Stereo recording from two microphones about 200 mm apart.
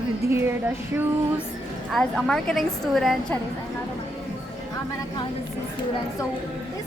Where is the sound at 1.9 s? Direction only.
5° left (ahead or behind).